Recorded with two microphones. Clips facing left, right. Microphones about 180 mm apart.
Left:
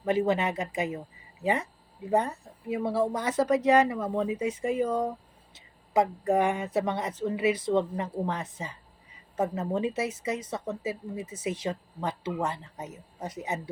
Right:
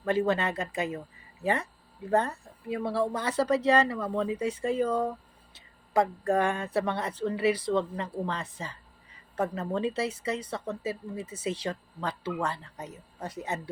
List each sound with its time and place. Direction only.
0.0 s a woman's voice: 20° left (ahead or behind)